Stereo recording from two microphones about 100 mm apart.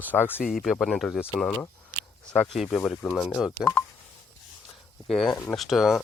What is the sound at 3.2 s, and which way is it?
Speech, 5° right (ahead or behind).